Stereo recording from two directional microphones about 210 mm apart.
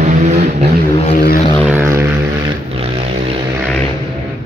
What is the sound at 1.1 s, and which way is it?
Vehicle, 45° left (ahead or behind).